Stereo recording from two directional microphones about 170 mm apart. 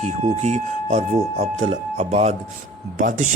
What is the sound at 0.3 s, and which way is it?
Speech, 40° right (ahead or behind).